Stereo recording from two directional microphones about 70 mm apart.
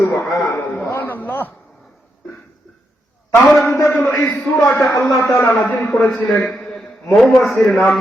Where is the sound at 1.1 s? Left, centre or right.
Left.